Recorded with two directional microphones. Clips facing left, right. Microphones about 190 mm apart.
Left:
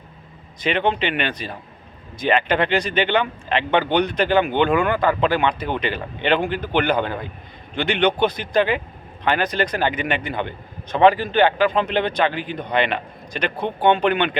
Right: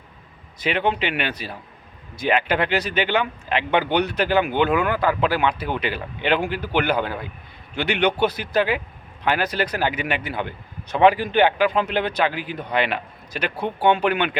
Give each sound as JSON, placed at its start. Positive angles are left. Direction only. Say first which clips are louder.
{"t": 0.6, "sound": "speech", "louder": "left 2 dB", "side_deg": -5}